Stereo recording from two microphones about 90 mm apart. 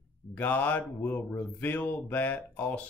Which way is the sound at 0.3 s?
20° left (ahead or behind).